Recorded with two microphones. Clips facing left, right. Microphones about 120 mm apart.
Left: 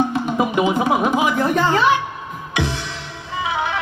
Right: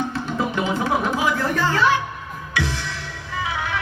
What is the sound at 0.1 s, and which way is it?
Speech, 15° left (ahead or behind).